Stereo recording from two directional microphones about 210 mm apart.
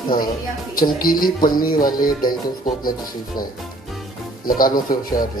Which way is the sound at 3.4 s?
20° left (ahead or behind).